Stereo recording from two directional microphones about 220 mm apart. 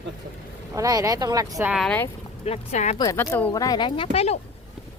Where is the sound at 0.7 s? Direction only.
15° right (ahead or behind).